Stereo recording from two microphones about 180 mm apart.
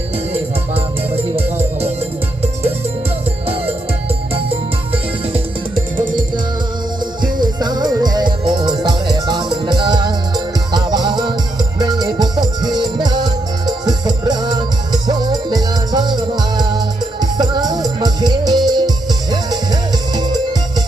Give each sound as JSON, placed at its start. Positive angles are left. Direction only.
{"t": 0.7, "sound": "music", "side_deg": -35}
{"t": 4.4, "sound": "music", "side_deg": -30}
{"t": 7.2, "sound": "music", "side_deg": -25}